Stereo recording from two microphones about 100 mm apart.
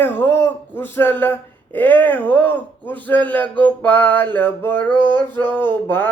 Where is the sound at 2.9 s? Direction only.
15° left (ahead or behind).